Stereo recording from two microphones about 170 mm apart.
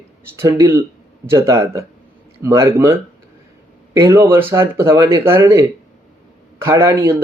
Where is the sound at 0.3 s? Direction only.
15° right (ahead or behind).